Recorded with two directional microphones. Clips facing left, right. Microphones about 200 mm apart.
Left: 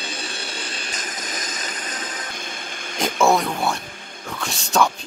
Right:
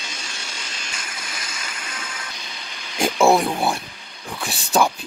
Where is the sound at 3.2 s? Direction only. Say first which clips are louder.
Right 2 dB; 30° right (ahead or behind).